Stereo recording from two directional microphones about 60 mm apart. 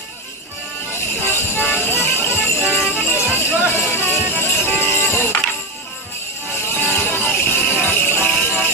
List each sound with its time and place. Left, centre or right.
1.2 s music: left
6.7 s music: left